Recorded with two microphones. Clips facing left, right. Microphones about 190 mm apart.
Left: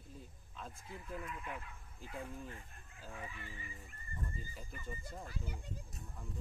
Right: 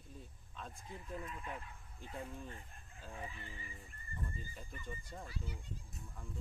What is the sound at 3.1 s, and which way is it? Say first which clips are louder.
Speech: right 1 dB; 30° right (ahead or behind).